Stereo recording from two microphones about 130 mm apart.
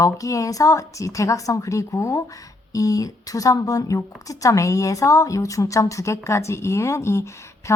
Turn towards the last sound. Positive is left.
turn(degrees=20)  # may be behind; listen again after turning